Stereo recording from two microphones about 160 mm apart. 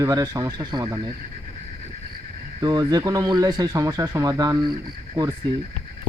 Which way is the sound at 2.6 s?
25° right (ahead or behind).